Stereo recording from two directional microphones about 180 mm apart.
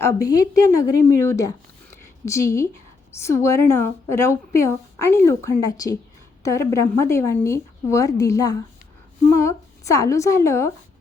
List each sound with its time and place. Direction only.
0.0 s a woman's voice: 20° left (ahead or behind)
2.0 s a sound: 15° left (ahead or behind)
3.1 s a woman's voice: 15° left (ahead or behind)